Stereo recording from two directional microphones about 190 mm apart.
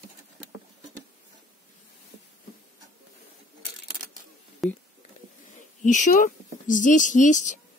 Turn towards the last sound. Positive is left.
turn(degrees=40)  # may be behind; listen again after turning